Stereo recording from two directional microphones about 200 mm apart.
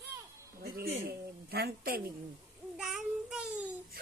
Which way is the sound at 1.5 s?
50° right (ahead or behind).